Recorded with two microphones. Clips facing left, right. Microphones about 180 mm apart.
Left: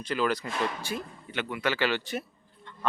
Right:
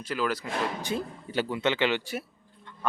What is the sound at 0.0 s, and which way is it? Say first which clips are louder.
Speech: left 2 dB; 5° right (ahead or behind).